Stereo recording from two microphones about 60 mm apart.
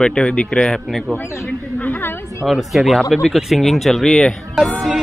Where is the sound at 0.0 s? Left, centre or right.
Centre.